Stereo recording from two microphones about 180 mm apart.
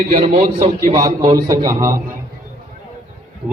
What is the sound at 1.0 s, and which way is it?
Speech, 20° right (ahead or behind).